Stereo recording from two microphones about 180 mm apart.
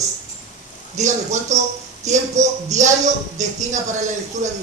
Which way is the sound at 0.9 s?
40° right (ahead or behind).